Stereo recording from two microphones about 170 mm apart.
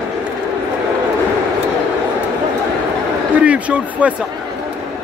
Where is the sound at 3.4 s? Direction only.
5° right (ahead or behind).